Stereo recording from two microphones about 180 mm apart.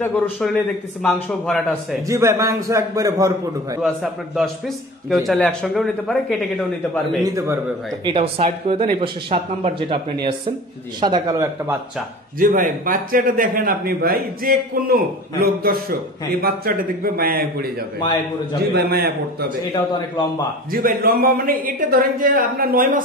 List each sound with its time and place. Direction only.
0.0 s a man's voice: centre (ahead or behind)
2.0 s a man's voice: 15° right (ahead or behind)
3.8 s a man's voice: centre (ahead or behind)
7.2 s a man's voice: 15° right (ahead or behind)
8.0 s speech: 30° right (ahead or behind)
11.0 s speech: 25° right (ahead or behind)
12.4 s a man's voice: 50° right (ahead or behind)
18.7 s a man's voice: 60° right (ahead or behind)
19.7 s a man's voice: 25° left (ahead or behind)
20.7 s a man's voice: 55° right (ahead or behind)